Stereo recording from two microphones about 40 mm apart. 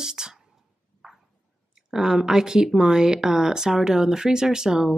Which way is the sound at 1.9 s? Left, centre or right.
Centre.